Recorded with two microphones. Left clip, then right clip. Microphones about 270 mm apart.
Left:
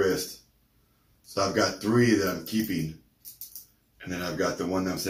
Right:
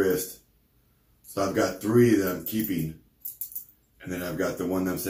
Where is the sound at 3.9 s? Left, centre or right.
Centre.